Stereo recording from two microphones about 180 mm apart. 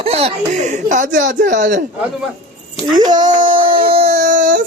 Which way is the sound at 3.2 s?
45° right (ahead or behind).